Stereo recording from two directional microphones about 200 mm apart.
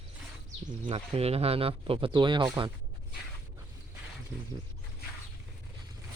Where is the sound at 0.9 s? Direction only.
30° right (ahead or behind).